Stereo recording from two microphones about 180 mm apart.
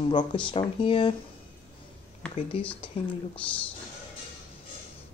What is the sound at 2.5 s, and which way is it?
Speech, 30° left (ahead or behind).